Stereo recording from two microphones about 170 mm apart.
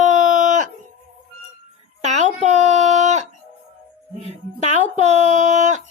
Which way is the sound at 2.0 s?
45° right (ahead or behind).